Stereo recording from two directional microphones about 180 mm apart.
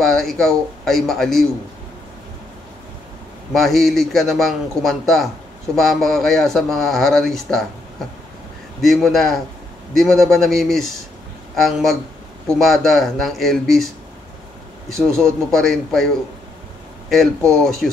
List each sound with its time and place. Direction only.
0.0 s speech: centre (ahead or behind)
3.5 s speech: centre (ahead or behind)
8.8 s speech: centre (ahead or behind)
15.0 s a man's voice: 15° right (ahead or behind)
15.5 s speech: centre (ahead or behind)
17.1 s speech: centre (ahead or behind)